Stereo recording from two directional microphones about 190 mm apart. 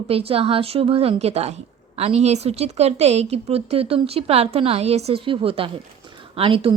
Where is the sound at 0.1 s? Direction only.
30° right (ahead or behind).